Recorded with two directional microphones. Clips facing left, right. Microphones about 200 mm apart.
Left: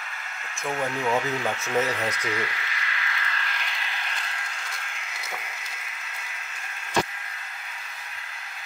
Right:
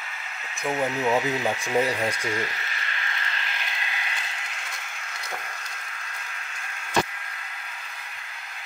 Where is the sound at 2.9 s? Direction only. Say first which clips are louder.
Left 1 dB; 30° right (ahead or behind).